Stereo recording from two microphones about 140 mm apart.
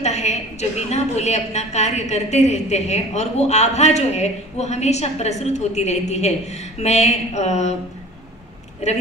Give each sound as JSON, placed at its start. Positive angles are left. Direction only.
{"t": 0.0, "sound": "a woman's voice", "side_deg": 55}
{"t": 8.8, "sound": "a woman's voice", "side_deg": 55}